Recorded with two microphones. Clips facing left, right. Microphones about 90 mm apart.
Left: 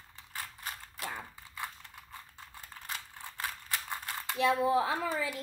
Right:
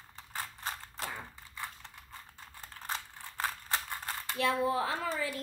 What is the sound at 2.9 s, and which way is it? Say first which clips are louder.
Mechanisms: right 3 dB; 35° right (ahead or behind).